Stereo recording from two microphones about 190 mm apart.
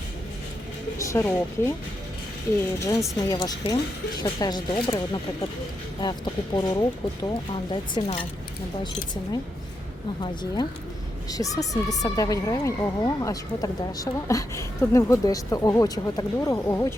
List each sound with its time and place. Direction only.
0.9 s speech: 15° left (ahead or behind)
2.8 s speech: 15° left (ahead or behind)
10.2 s speech: 20° left (ahead or behind)